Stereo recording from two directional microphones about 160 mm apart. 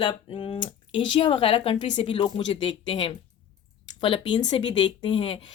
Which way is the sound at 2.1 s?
30° left (ahead or behind).